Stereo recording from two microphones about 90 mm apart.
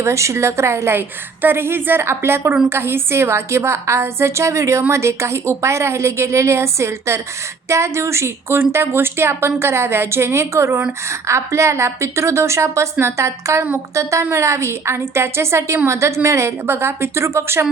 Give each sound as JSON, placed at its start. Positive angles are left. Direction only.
{"t": 0.0, "sound": "a woman's voice", "side_deg": -35}